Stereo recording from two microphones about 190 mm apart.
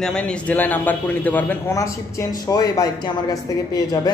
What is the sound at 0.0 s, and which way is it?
A man's voice, 5° left (ahead or behind).